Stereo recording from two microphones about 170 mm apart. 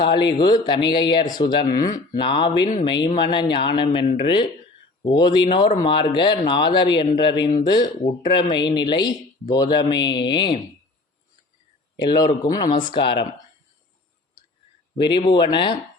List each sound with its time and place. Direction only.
0.0 s speech: 25° left (ahead or behind)
12.0 s speech: 25° left (ahead or behind)
15.0 s speech: 30° left (ahead or behind)